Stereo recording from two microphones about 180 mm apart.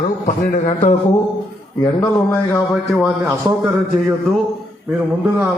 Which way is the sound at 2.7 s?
Centre (ahead or behind).